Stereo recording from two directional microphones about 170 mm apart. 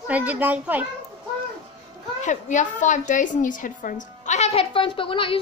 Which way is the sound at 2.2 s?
45° left (ahead or behind).